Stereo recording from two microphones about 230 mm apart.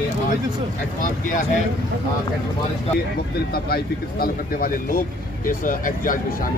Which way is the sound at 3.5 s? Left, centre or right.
Left.